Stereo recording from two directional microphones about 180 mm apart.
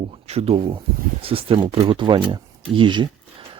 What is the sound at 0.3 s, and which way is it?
Speech, 35° right (ahead or behind).